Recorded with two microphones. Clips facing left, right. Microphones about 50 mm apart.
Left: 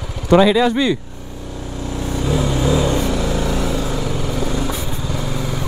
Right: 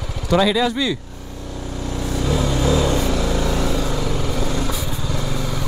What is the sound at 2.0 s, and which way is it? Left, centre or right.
Vehicle, centre.